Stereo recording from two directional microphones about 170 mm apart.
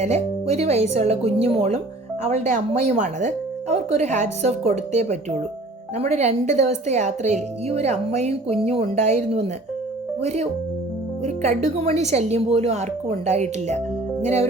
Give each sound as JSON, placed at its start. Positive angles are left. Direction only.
{"t": 0.0, "sound": "speech", "side_deg": -40}